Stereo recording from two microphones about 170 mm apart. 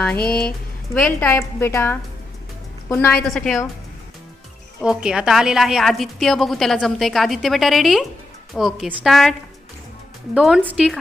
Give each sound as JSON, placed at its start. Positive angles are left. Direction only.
{"t": 0.2, "sound": "speech", "side_deg": 65}
{"t": 0.9, "sound": "a woman's voice", "side_deg": 5}
{"t": 3.2, "sound": "a woman's voice", "side_deg": 0}
{"t": 4.8, "sound": "a woman's voice", "side_deg": -5}
{"t": 10.3, "sound": "a woman's voice", "side_deg": 0}